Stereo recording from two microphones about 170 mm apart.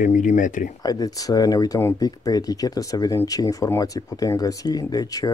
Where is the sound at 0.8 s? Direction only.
20° left (ahead or behind).